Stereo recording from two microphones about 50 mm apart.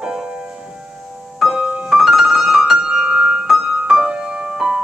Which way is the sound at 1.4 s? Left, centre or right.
Centre.